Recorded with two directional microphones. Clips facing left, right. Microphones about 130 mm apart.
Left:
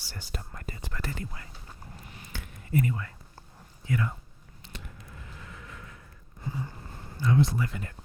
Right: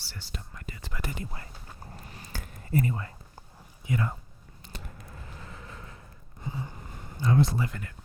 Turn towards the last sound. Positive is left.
turn(degrees=-35)  # may be behind; listen again after turning